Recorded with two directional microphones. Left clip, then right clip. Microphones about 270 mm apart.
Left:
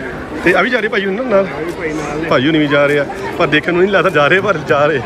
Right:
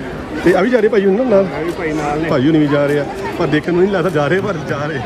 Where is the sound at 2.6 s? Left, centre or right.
Centre.